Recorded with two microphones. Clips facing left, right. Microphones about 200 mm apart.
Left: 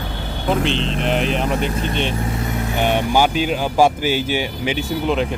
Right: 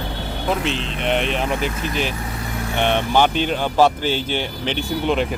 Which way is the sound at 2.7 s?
10° left (ahead or behind).